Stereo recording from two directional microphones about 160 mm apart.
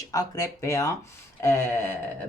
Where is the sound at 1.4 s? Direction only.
15° left (ahead or behind).